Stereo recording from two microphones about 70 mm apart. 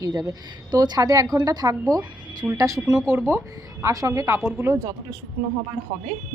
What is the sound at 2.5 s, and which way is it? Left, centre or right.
Speech, right.